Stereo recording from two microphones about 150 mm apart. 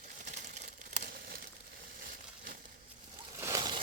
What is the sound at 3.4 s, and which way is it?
Water, 25° right (ahead or behind).